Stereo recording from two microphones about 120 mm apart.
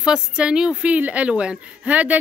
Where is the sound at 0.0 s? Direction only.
5° right (ahead or behind).